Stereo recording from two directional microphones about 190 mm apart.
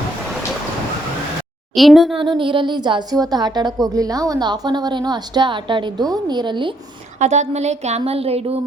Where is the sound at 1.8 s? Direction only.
Centre (ahead or behind).